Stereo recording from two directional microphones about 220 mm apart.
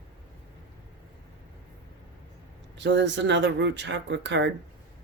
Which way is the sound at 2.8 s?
50° right (ahead or behind).